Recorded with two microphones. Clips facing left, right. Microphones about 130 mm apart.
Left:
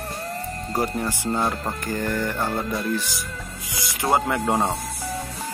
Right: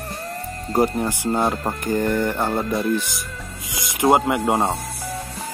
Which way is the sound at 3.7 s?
20° right (ahead or behind).